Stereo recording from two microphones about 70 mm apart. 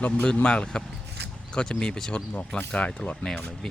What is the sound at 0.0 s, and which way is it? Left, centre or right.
Speech, centre.